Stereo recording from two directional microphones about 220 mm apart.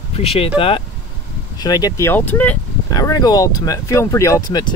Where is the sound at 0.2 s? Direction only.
25° left (ahead or behind).